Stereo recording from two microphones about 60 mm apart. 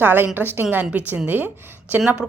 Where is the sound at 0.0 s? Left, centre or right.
Right.